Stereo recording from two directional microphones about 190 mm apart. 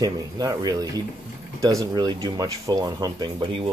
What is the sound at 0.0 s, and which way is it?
Speech, 20° right (ahead or behind).